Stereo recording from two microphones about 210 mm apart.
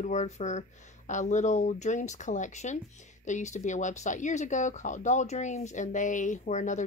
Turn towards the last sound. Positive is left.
turn(degrees=35)  # may be behind; listen again after turning